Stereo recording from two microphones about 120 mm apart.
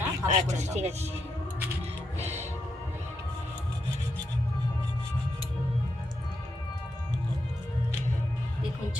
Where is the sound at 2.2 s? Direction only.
65° right (ahead or behind).